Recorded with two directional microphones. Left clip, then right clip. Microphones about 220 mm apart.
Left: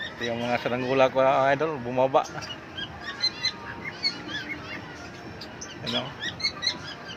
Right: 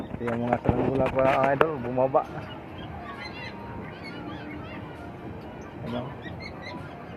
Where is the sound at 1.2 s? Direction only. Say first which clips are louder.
Even; 30° left (ahead or behind).